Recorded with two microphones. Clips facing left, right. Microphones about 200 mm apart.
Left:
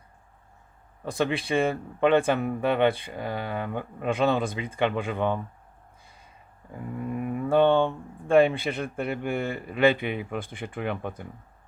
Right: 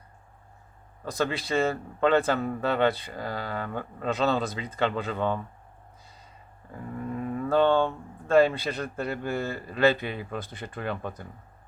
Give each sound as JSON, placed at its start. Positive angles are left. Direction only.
{"t": 1.2, "sound": "speech", "side_deg": 15}
{"t": 6.7, "sound": "speech", "side_deg": 15}